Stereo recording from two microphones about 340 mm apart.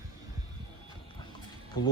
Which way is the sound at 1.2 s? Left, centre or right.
Centre.